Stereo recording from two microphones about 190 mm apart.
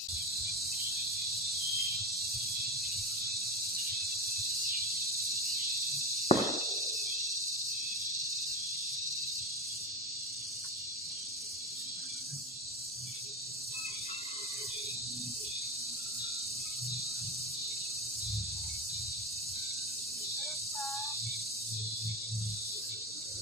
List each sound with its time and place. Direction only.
6.3 s walk: 35° left (ahead or behind)